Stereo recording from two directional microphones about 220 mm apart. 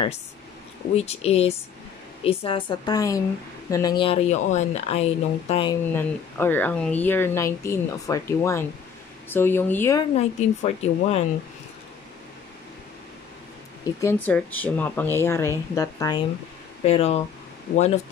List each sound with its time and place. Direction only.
0.9 s speech: 30° left (ahead or behind)
5.9 s speech: 10° left (ahead or behind)
10.1 s speech: 30° left (ahead or behind)
14.0 s speech: 10° left (ahead or behind)
16.8 s speech: 30° left (ahead or behind)